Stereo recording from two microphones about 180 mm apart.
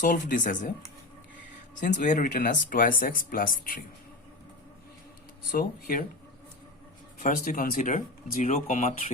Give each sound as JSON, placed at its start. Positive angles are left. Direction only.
{"t": 0.0, "sound": "speech", "side_deg": 45}
{"t": 2.0, "sound": "speech", "side_deg": 45}
{"t": 5.5, "sound": "speech", "side_deg": 50}
{"t": 7.2, "sound": "speech", "side_deg": 45}